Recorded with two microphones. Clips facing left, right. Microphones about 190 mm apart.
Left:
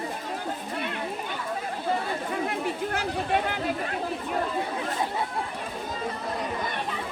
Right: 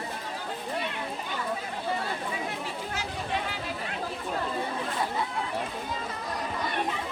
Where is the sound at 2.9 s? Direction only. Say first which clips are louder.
Left 4 dB; 55° left (ahead or behind).